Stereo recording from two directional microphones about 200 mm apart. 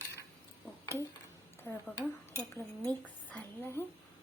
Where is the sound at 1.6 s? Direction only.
10° left (ahead or behind).